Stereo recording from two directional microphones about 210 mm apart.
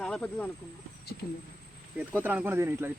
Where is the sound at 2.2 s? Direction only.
10° right (ahead or behind).